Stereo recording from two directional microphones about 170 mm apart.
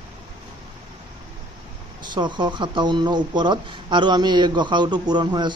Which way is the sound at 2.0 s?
25° right (ahead or behind).